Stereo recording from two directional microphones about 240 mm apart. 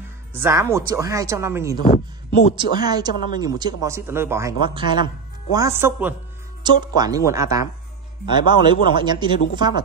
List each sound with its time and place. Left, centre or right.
0.4 s speech: centre